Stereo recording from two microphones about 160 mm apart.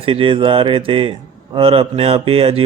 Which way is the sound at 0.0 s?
35° right (ahead or behind).